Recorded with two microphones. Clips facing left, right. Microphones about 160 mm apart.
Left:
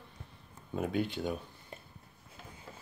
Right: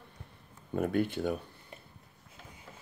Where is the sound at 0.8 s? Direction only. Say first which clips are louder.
Right 3 dB; 50° right (ahead or behind).